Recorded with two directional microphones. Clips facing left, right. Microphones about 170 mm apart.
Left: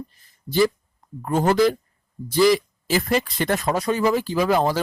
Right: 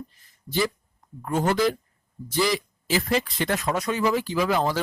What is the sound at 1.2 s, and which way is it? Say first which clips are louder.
Speech: left 4 dB; 35° left (ahead or behind).